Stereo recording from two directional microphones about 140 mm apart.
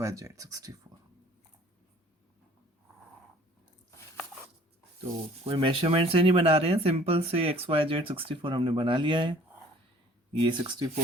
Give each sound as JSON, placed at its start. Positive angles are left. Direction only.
{"t": 0.0, "sound": "speech", "side_deg": -20}
{"t": 5.5, "sound": "speech", "side_deg": -40}
{"t": 10.4, "sound": "speech", "side_deg": -30}